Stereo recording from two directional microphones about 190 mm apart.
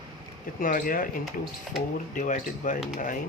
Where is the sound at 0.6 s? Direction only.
45° left (ahead or behind).